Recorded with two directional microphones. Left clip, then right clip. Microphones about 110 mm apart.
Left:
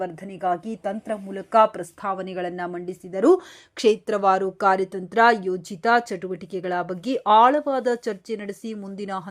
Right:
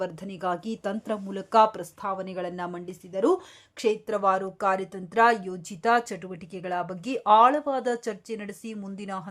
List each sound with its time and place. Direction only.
0.0 s speech: 10° right (ahead or behind)
1.4 s a woman's voice: centre (ahead or behind)
1.8 s a woman's voice: 15° left (ahead or behind)
2.4 s a woman's voice: 5° left (ahead or behind)
3.1 s speech: 30° left (ahead or behind)
3.8 s speech: 45° left (ahead or behind)
4.1 s speech: 30° left (ahead or behind)